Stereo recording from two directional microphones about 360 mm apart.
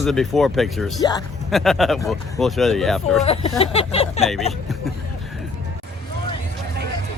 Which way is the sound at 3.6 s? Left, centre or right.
Centre.